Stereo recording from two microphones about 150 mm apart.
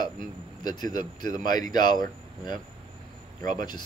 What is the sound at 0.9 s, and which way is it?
Speech, 25° left (ahead or behind).